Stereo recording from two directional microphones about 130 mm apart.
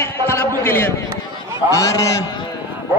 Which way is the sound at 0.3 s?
20° left (ahead or behind).